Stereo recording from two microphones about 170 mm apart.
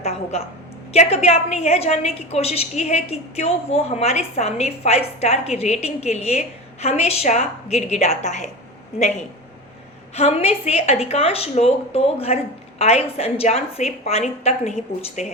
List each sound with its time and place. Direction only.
0.0 s a sound: 40° left (ahead or behind)
0.9 s a woman's voice: 35° left (ahead or behind)
10.2 s a woman's voice: 35° left (ahead or behind)